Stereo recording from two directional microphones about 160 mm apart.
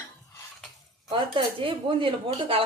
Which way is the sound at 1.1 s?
30° right (ahead or behind).